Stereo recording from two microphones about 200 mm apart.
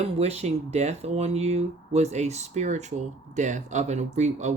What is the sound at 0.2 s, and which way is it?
Speech, 30° right (ahead or behind).